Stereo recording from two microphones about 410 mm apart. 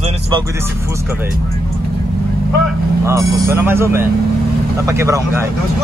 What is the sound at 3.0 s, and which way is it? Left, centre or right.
Speech, centre.